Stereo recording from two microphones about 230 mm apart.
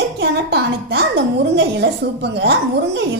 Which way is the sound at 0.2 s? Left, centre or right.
Right.